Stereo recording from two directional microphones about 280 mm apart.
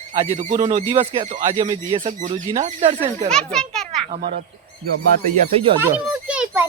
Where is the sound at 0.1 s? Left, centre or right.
Right.